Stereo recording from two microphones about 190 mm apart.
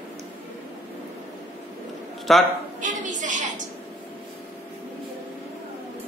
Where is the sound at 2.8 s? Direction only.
40° right (ahead or behind).